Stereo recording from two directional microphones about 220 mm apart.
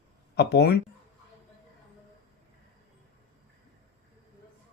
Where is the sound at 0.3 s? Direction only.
50° left (ahead or behind).